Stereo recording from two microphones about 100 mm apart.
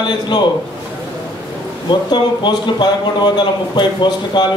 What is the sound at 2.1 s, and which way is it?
Speech, 50° left (ahead or behind).